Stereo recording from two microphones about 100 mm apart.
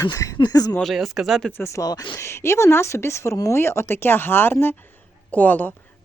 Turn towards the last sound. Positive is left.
turn(degrees=20)  # may be behind; listen again after turning